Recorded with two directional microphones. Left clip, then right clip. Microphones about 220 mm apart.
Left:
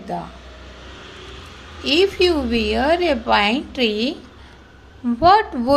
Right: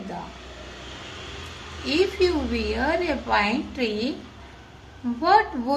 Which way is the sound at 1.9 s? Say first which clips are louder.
Left 6 dB; 40° left (ahead or behind).